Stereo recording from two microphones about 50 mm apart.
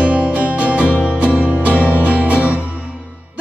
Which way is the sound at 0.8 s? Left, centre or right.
Left.